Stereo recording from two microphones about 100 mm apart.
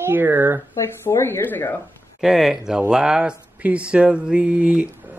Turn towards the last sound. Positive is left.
turn(degrees=-10)  # may be behind; listen again after turning